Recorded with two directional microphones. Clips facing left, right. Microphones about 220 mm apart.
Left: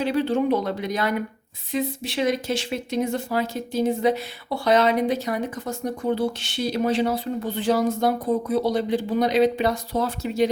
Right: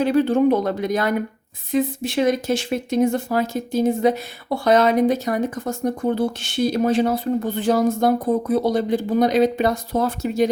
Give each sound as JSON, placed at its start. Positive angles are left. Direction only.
{"t": 0.0, "sound": "speech", "side_deg": -50}